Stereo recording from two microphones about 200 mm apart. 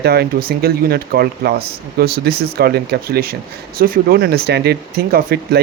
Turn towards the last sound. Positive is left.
turn(degrees=-50)  # may be behind; listen again after turning